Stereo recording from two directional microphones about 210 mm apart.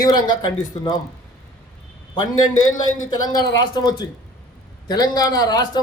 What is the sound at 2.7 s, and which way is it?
A man's voice, 15° left (ahead or behind).